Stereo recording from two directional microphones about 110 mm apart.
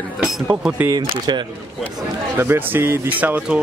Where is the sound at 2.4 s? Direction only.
20° right (ahead or behind).